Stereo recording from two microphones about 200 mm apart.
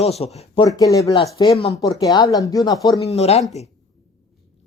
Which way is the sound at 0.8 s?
15° left (ahead or behind).